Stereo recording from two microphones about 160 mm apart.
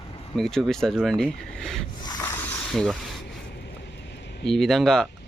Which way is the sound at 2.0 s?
20° left (ahead or behind).